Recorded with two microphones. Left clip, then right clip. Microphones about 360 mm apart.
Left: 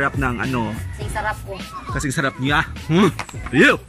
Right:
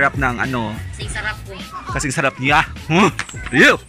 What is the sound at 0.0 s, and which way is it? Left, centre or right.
Speech, centre.